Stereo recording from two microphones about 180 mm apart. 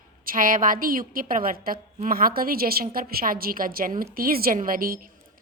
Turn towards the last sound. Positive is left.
turn(degrees=-55)  # may be behind; listen again after turning